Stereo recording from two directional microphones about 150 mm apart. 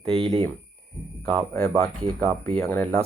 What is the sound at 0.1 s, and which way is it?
Speech, 40° right (ahead or behind).